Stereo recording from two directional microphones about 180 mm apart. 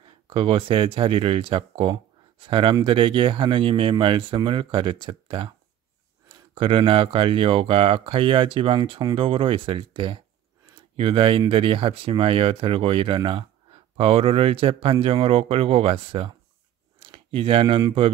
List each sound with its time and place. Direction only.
0.0 s speech: 30° right (ahead or behind)
6.5 s speech: 30° right (ahead or behind)